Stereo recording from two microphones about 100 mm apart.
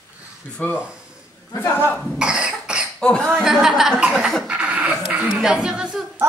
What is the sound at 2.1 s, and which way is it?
Cough, 10° right (ahead or behind).